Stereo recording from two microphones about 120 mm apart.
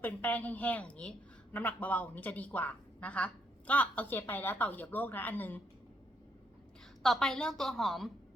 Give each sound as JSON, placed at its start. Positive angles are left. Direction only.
{"t": 0.0, "sound": "speech", "side_deg": 15}
{"t": 7.0, "sound": "a woman's voice", "side_deg": 5}